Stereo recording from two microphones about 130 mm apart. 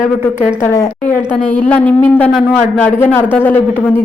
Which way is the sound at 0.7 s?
20° left (ahead or behind).